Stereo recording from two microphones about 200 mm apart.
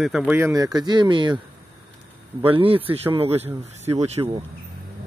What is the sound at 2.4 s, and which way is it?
Speech, 25° right (ahead or behind).